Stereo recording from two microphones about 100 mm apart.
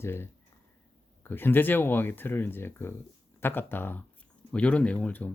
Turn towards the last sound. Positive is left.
turn(degrees=15)  # may be behind; listen again after turning